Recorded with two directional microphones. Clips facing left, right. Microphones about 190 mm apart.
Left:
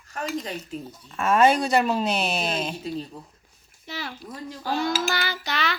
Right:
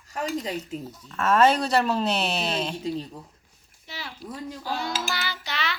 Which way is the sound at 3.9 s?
45° left (ahead or behind).